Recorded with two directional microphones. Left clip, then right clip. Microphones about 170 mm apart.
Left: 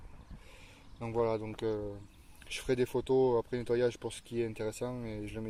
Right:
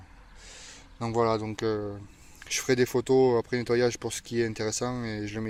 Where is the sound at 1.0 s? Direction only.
25° right (ahead or behind).